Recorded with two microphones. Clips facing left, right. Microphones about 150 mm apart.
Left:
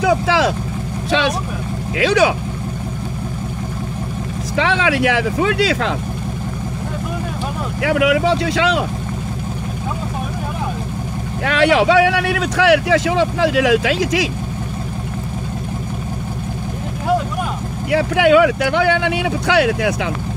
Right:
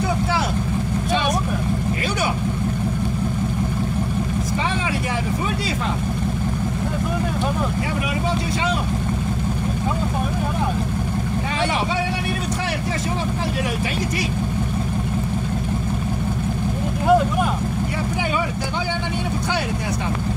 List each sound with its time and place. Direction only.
0.0 s vehicle: 90° left
2.0 s speech: 90° left
4.6 s speech: 90° left
7.8 s speech: 90° left
11.4 s speech: 90° left
17.9 s speech: 90° left